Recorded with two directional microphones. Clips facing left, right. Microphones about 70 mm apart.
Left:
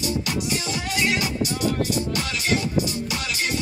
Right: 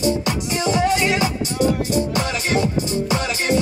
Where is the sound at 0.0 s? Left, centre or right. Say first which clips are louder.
Right 5 dB; right.